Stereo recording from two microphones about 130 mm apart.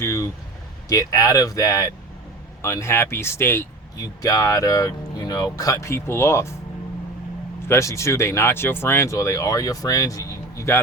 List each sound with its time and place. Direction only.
0.0 s speech: 20° left (ahead or behind)
7.7 s speech: 25° left (ahead or behind)